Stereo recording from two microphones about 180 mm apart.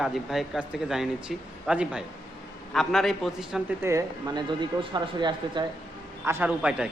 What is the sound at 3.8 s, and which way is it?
Speech, 20° right (ahead or behind).